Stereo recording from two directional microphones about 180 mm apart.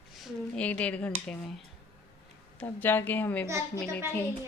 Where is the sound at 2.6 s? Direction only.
10° left (ahead or behind).